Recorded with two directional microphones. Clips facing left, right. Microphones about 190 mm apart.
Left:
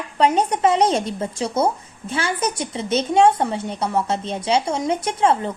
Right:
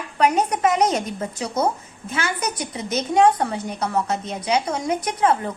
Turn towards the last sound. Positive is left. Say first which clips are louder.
# left 1 dB
turn(degrees=25)  # may be behind; listen again after turning